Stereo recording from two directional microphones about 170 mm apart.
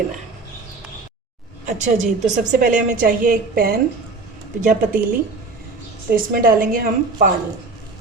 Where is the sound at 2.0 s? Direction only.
45° right (ahead or behind).